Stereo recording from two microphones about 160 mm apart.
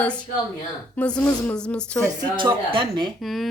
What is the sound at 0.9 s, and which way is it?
A woman's voice, 10° left (ahead or behind).